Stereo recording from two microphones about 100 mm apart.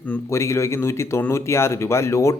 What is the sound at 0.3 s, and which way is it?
Speech, 30° left (ahead or behind).